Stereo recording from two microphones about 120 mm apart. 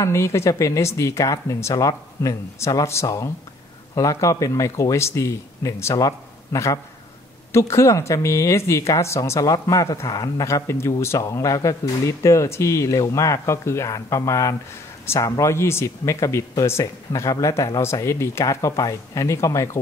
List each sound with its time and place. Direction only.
0.0 s speech: 25° left (ahead or behind)